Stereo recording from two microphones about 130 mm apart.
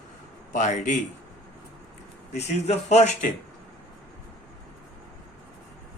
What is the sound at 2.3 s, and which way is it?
Speech, 55° left (ahead or behind).